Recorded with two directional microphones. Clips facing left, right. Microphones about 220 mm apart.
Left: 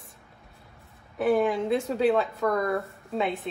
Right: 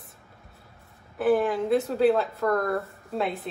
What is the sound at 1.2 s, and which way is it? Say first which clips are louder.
Speech: right 1 dB; centre (ahead or behind).